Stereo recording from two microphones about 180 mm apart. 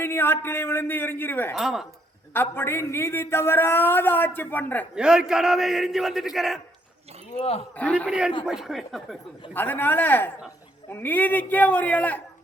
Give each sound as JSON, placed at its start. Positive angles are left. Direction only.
{"t": 0.0, "sound": "a man's voice", "side_deg": 10}
{"t": 1.5, "sound": "a man's voice", "side_deg": 0}
{"t": 2.3, "sound": "a man's voice", "side_deg": 10}
{"t": 4.9, "sound": "a man's voice", "side_deg": -5}
{"t": 7.3, "sound": "speech", "side_deg": 35}
{"t": 7.8, "sound": "a man's voice", "side_deg": 5}
{"t": 9.5, "sound": "a man's voice", "side_deg": 10}